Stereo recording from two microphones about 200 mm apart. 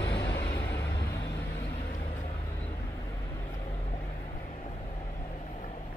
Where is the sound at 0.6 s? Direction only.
15° left (ahead or behind).